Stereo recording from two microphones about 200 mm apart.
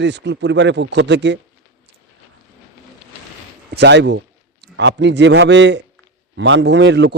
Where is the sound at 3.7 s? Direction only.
60° right (ahead or behind).